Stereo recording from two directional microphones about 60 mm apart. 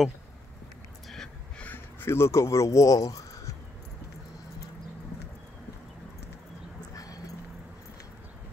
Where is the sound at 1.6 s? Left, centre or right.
Left.